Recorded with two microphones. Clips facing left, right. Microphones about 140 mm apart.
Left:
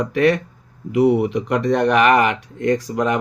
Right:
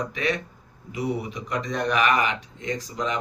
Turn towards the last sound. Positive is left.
turn(degrees=60)  # may be behind; listen again after turning